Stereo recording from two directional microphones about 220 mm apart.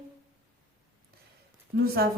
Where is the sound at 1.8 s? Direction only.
45° right (ahead or behind).